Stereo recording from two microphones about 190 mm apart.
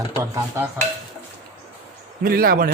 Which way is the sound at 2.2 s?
50° right (ahead or behind).